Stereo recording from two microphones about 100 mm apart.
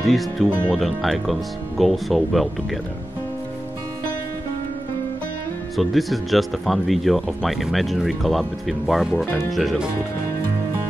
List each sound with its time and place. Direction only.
0.0 s speech: centre (ahead or behind)
5.8 s speech: centre (ahead or behind)
9.1 s speech: 25° left (ahead or behind)
9.5 s speech: centre (ahead or behind)